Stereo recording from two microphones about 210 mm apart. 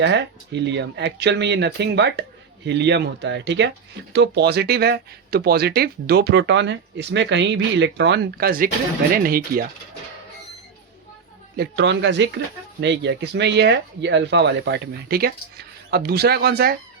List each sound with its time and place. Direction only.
0.0 s speech: 55° right (ahead or behind)
11.5 s speech: 55° right (ahead or behind)